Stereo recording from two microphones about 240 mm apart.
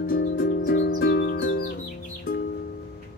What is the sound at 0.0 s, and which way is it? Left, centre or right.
Music, left.